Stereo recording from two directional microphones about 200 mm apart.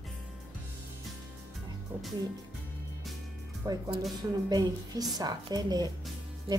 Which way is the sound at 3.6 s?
20° right (ahead or behind).